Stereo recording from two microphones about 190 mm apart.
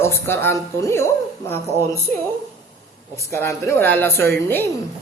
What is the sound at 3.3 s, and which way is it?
Speech, 15° left (ahead or behind).